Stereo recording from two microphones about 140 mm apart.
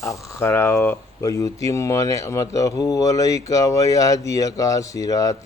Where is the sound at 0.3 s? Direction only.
20° left (ahead or behind).